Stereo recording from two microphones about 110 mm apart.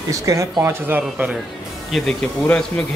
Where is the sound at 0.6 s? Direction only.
20° right (ahead or behind).